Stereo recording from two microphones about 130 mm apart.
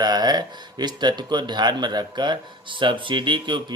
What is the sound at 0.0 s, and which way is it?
Speech, 35° right (ahead or behind).